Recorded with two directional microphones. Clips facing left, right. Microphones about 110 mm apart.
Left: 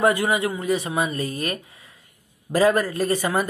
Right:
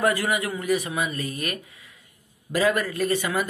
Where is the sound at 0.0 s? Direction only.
25° left (ahead or behind).